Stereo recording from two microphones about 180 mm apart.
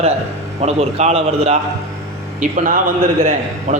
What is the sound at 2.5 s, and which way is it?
A man's voice, 45° right (ahead or behind).